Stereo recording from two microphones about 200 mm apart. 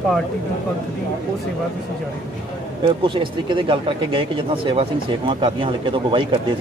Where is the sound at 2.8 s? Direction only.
25° right (ahead or behind).